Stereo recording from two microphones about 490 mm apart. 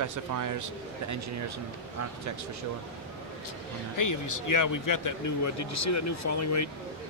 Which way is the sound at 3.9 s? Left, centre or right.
Left.